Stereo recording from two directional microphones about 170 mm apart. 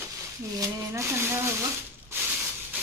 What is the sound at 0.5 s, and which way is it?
Speech, 20° right (ahead or behind).